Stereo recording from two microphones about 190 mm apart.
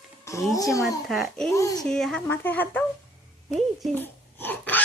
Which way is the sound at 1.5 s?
15° left (ahead or behind).